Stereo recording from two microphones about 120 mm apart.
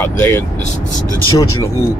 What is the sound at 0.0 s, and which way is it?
Speech, 20° left (ahead or behind).